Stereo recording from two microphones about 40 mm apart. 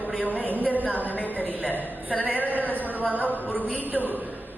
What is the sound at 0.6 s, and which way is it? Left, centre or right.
Speech, left.